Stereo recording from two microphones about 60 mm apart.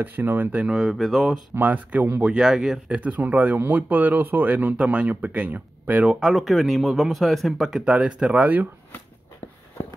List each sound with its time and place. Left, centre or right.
0.0 s speech: right
0.7 s speech: centre
1.5 s speech: right
2.3 s speech: centre
2.9 s speech: right
6.1 s speech: centre
7.8 s speech: centre